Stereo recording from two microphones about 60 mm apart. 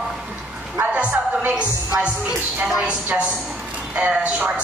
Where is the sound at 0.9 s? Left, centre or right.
Right.